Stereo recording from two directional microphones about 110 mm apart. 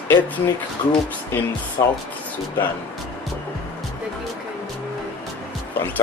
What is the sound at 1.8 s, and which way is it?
Speech, 35° left (ahead or behind).